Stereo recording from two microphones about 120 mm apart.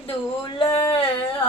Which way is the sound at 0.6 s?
45° left (ahead or behind).